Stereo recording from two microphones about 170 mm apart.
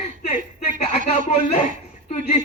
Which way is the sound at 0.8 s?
40° left (ahead or behind).